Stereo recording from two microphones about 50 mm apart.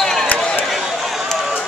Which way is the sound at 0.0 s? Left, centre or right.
Centre.